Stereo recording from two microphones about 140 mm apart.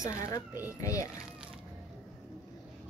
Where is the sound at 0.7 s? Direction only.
20° left (ahead or behind).